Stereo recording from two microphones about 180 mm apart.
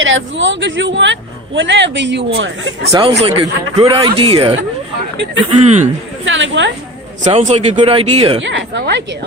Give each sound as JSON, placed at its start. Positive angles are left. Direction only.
{"t": 0.0, "sound": "speech", "side_deg": -90}
{"t": 3.2, "sound": "speech", "side_deg": -30}
{"t": 6.2, "sound": "a woman's voice", "side_deg": -90}
{"t": 7.3, "sound": "speech", "side_deg": -40}
{"t": 8.4, "sound": "speech", "side_deg": -85}